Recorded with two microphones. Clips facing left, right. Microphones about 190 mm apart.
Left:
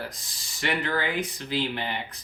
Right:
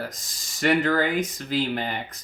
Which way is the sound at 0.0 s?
45° right (ahead or behind).